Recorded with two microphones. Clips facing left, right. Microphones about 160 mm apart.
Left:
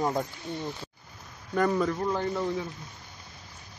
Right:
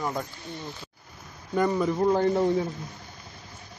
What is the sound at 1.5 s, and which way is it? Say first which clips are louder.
Speech: right 1 dB; 5° right (ahead or behind).